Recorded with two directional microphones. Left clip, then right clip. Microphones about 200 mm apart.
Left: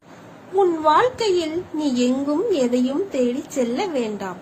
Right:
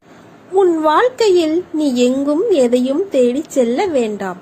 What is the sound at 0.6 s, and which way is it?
A woman's voice, 25° right (ahead or behind).